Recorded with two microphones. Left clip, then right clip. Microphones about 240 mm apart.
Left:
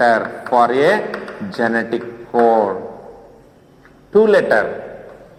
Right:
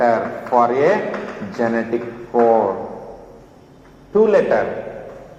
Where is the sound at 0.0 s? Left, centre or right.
Left.